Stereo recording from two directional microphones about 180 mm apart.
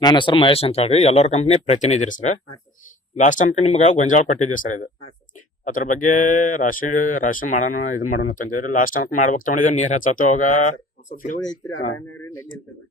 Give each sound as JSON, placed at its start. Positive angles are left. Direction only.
{"t": 0.0, "sound": "speech", "side_deg": 25}